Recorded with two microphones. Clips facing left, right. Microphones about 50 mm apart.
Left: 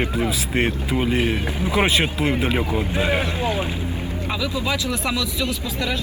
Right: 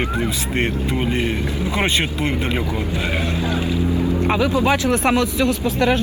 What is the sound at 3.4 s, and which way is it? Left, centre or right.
Speech, left.